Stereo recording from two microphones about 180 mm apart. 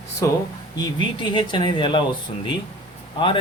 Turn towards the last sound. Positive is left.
turn(degrees=30)  # may be behind; listen again after turning